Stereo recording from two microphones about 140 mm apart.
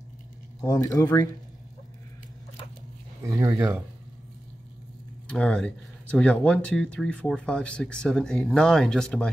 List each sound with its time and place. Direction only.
0.6 s speech: 25° left (ahead or behind)
3.3 s speech: 20° right (ahead or behind)
5.3 s speech: 5° left (ahead or behind)